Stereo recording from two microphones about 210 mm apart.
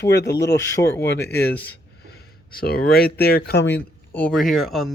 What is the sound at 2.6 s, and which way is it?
Speech, 45° left (ahead or behind).